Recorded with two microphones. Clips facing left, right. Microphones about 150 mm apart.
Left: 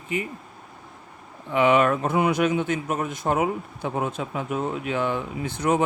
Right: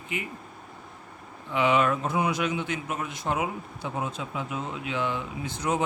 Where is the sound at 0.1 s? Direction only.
40° left (ahead or behind).